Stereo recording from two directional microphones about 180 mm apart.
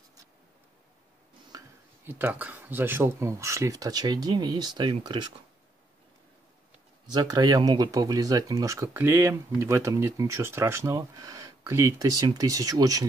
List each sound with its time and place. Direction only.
1.5 s a sound: 20° right (ahead or behind)
2.0 s speech: 10° right (ahead or behind)
7.1 s speech: 25° right (ahead or behind)